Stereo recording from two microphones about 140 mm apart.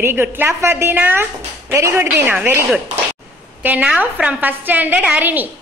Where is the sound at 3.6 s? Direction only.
10° right (ahead or behind).